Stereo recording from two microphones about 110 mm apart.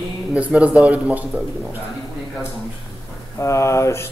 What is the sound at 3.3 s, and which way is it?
Speech, 25° left (ahead or behind).